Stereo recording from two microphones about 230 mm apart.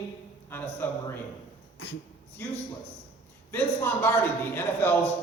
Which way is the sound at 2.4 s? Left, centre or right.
Centre.